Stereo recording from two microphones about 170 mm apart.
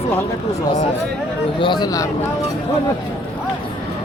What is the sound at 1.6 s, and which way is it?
Speech, 25° left (ahead or behind).